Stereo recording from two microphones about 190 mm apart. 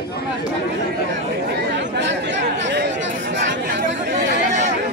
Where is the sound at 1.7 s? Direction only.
70° right (ahead or behind).